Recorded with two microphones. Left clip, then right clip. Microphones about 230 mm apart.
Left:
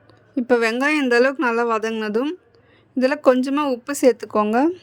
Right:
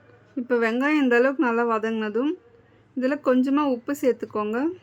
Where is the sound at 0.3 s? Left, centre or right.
Left.